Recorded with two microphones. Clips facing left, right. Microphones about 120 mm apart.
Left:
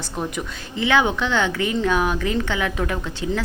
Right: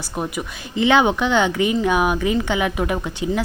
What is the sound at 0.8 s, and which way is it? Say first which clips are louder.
Speech: right 3 dB; 20° right (ahead or behind).